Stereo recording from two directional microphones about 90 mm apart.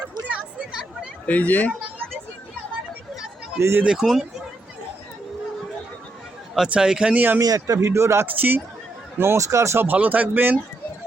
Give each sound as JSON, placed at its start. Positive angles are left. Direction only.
{"t": 0.3, "sound": "a sound", "side_deg": -10}
{"t": 1.3, "sound": "speech", "side_deg": 15}
{"t": 3.6, "sound": "speech", "side_deg": -30}
{"t": 3.8, "sound": "speech", "side_deg": -5}
{"t": 6.7, "sound": "speech", "side_deg": -10}
{"t": 7.4, "sound": "speech", "side_deg": -40}